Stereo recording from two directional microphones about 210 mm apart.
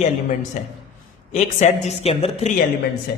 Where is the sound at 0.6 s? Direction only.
35° left (ahead or behind).